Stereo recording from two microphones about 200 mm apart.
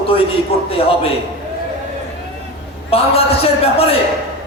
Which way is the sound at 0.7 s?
30° left (ahead or behind).